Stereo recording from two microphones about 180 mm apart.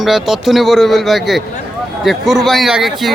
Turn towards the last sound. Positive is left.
turn(degrees=0)  # may be behind; listen again after turning